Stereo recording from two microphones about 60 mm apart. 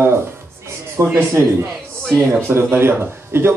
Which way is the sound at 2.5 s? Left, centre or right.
Right.